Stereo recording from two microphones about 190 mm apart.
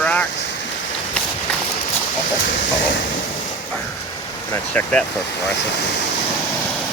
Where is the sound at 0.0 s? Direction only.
5° left (ahead or behind).